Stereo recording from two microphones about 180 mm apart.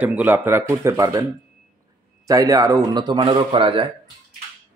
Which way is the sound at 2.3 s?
20° right (ahead or behind).